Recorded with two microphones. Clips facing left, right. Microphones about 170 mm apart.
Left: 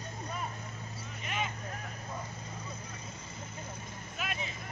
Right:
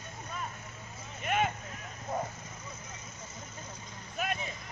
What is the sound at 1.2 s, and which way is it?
Vehicle, 55° right (ahead or behind).